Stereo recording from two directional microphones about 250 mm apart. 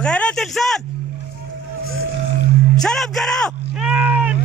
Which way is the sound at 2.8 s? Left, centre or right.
Centre.